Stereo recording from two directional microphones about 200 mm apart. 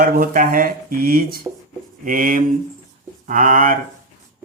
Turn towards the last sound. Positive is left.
turn(degrees=-45)  # may be behind; listen again after turning